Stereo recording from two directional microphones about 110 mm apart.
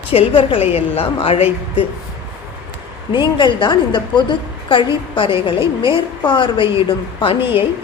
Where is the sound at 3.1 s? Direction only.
45° left (ahead or behind).